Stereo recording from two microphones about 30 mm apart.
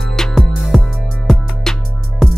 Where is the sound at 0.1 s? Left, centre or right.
Centre.